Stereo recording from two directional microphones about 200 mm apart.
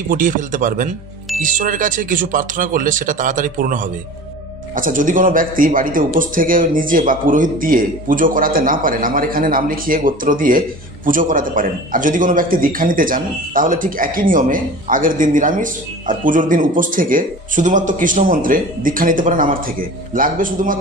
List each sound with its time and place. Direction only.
0.1 s a man's voice: 40° right (ahead or behind)